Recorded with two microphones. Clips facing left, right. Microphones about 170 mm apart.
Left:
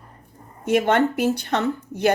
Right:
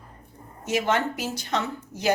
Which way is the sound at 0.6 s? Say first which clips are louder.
Left 6 dB; 55° left (ahead or behind).